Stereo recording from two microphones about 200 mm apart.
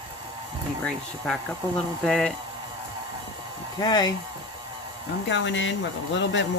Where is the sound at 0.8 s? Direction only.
5° left (ahead or behind).